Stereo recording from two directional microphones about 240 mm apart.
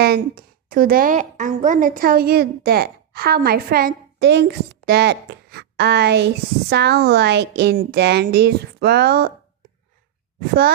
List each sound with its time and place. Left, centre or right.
0.0 s a woman's voice: right